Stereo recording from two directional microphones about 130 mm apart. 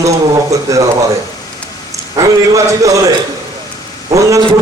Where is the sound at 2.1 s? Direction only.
25° right (ahead or behind).